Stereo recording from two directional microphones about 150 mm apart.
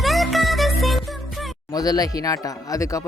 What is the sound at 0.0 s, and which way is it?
Music, centre (ahead or behind).